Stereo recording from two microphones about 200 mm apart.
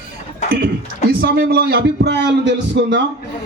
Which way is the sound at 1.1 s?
50° right (ahead or behind).